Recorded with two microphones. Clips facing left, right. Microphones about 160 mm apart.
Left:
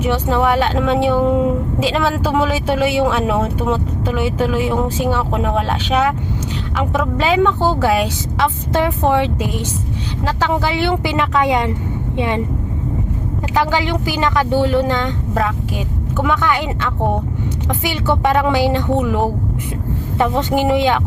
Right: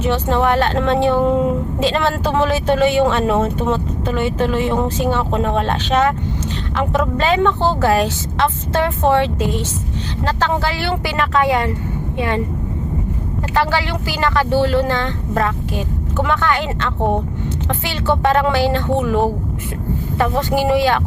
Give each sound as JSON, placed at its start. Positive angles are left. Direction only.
{"t": 0.0, "sound": "speech", "side_deg": 10}
{"t": 13.6, "sound": "speech", "side_deg": 15}
{"t": 16.1, "sound": "speech", "side_deg": 10}